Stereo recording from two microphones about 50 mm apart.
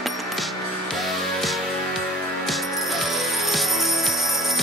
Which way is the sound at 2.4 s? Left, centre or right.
Centre.